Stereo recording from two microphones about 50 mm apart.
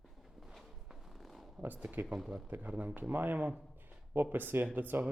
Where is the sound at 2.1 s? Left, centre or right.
Centre.